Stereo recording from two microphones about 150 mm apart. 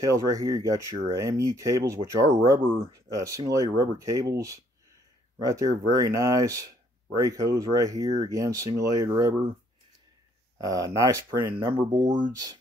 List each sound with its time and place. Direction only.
0.0 s speech: 20° right (ahead or behind)
10.6 s speech: 20° right (ahead or behind)